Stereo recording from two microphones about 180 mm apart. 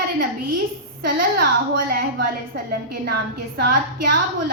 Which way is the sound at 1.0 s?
55° right (ahead or behind).